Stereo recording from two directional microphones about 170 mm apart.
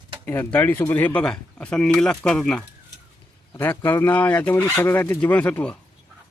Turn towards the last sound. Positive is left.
turn(degrees=10)  # may be behind; listen again after turning